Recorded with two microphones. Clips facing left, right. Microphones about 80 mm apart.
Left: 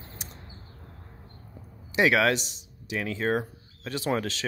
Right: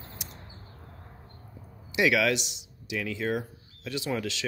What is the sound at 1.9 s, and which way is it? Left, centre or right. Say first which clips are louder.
Speech: left 2 dB; left.